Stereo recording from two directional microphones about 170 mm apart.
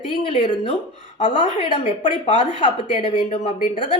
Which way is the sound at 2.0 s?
45° left (ahead or behind).